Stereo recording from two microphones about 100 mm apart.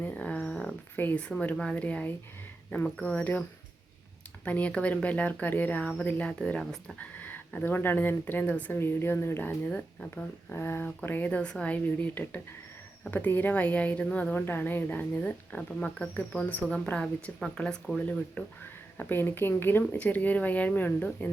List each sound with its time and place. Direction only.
0.0 s a sound: 15° left (ahead or behind)
0.9 s a woman's voice: 15° left (ahead or behind)
4.4 s a woman's voice: 15° left (ahead or behind)
7.0 s a woman's voice: 15° left (ahead or behind)